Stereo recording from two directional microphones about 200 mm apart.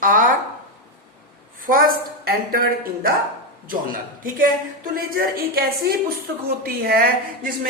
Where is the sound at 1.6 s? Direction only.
45° right (ahead or behind).